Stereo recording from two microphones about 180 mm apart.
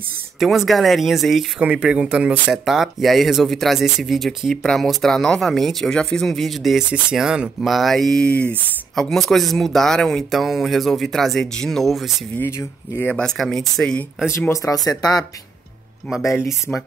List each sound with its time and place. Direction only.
0.4 s speech: centre (ahead or behind)
12.4 s speech: 15° left (ahead or behind)
14.3 s speech: 15° left (ahead or behind)
16.3 s speech: 15° left (ahead or behind)